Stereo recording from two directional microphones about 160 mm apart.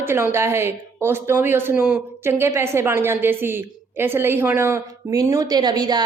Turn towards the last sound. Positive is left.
turn(degrees=-25)  # may be behind; listen again after turning